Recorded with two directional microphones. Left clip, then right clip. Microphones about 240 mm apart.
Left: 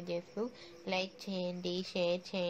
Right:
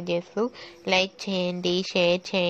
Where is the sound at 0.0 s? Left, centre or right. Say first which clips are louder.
Right 12 dB; right.